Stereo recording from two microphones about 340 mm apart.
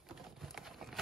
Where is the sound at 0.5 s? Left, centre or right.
Centre.